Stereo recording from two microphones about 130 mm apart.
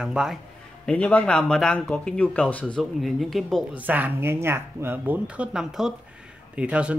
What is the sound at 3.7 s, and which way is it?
Speech, 15° right (ahead or behind).